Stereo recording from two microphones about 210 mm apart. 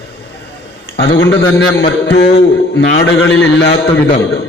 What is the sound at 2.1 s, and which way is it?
A man's voice, 50° left (ahead or behind).